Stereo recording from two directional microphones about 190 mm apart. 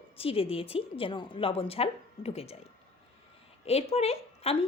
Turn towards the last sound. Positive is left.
turn(degrees=30)  # may be behind; listen again after turning